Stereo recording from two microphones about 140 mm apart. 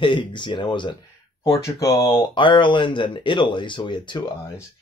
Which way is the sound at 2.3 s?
35° left (ahead or behind).